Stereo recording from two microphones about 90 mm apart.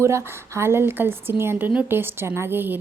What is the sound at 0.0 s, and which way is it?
A woman's voice, 30° right (ahead or behind).